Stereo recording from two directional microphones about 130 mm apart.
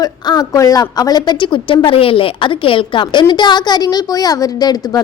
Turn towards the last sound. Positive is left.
turn(degrees=30)  # may be behind; listen again after turning